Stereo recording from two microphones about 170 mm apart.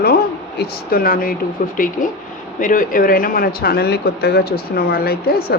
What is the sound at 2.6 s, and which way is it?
Speech, 50° left (ahead or behind).